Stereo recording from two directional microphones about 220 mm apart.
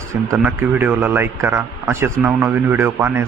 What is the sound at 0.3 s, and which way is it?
Speech, 10° right (ahead or behind).